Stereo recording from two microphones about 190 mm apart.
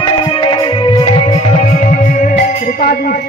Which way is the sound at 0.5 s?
25° left (ahead or behind).